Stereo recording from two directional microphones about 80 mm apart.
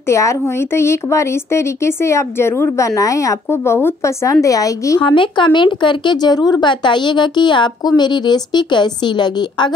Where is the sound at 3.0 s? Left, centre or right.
Left.